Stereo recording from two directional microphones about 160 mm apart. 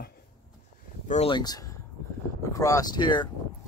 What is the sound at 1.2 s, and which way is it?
Speech, 25° left (ahead or behind).